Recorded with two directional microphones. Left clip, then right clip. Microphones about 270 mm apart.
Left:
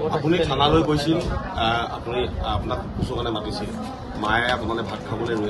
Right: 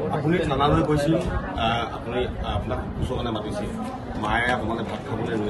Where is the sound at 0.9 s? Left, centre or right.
Left.